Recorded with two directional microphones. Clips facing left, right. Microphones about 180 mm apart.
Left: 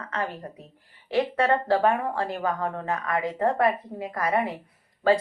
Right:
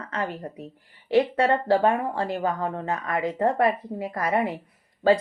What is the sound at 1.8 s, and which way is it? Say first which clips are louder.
Speech: right 1 dB; 30° right (ahead or behind).